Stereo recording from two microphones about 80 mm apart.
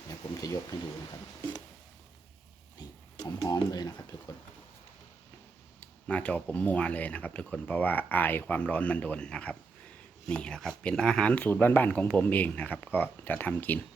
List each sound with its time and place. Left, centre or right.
0.1 s speech: left
2.7 s pig: left
3.5 s speech: left
6.1 s speech: centre